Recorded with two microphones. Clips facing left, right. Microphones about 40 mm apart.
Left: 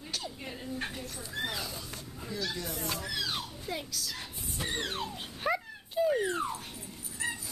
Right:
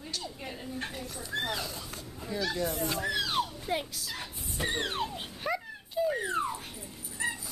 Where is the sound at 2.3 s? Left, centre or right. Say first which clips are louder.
Right 5 dB; right.